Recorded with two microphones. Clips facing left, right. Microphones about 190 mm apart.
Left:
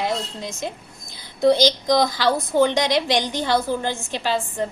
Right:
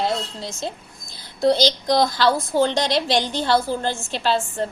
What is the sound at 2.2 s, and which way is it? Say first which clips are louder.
A woman's voice: even; 15° left (ahead or behind).